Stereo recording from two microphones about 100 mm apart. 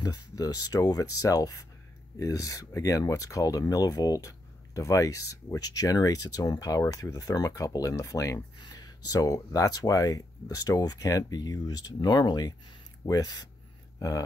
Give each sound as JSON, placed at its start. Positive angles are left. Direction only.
{"t": 0.0, "sound": "speech", "side_deg": 40}